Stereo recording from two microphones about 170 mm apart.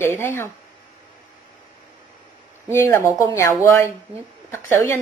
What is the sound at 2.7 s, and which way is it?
A woman's voice, 15° left (ahead or behind).